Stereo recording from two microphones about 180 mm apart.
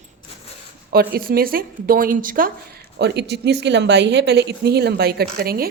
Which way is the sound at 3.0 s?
70° right (ahead or behind).